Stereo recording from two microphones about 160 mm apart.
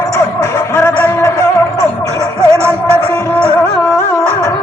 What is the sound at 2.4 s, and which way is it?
Music, 15° right (ahead or behind).